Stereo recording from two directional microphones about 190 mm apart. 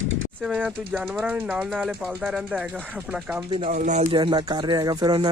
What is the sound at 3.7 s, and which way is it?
Speech, 40° right (ahead or behind).